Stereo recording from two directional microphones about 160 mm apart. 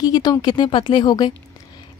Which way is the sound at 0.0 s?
25° left (ahead or behind).